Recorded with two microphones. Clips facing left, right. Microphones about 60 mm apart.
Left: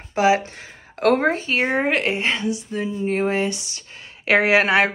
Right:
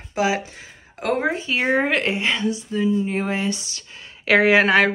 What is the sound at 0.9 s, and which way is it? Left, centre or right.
Speech, left.